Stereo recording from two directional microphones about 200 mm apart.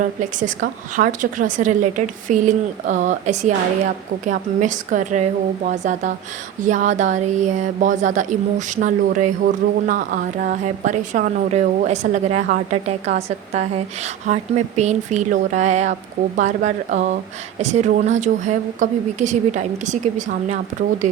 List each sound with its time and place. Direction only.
0.3 s speech: 40° right (ahead or behind)